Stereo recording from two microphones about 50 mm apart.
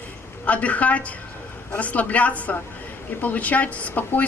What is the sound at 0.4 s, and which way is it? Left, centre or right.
Speech, left.